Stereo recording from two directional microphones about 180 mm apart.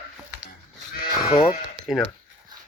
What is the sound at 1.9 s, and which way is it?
Speech, centre (ahead or behind).